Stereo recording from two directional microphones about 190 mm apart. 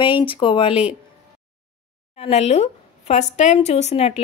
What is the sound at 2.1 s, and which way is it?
A woman's voice, 35° left (ahead or behind).